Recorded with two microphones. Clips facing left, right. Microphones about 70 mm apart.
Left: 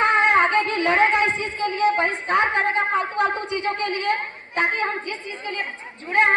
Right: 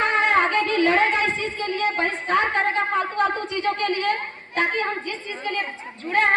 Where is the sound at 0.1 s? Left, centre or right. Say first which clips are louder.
Left 2 dB; left.